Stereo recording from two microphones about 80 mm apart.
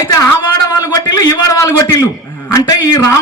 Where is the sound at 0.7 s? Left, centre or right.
Left.